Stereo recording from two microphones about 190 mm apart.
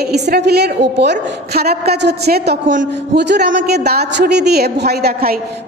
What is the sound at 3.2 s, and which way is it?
A woman's voice, 65° right (ahead or behind).